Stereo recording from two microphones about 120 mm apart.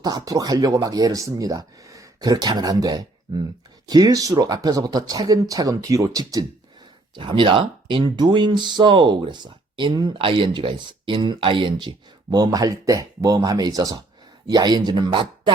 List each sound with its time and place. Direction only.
0.0 s speech: 35° right (ahead or behind)
7.2 s speech: 45° right (ahead or behind)